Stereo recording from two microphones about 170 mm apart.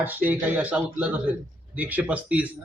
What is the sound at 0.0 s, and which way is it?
A man's voice, 10° right (ahead or behind).